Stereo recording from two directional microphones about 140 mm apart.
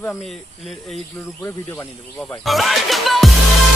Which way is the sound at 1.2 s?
20° left (ahead or behind).